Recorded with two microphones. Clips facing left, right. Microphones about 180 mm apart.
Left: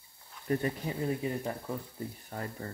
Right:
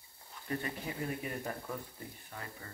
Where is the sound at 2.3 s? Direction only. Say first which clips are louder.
Left 8 dB; 45° left (ahead or behind).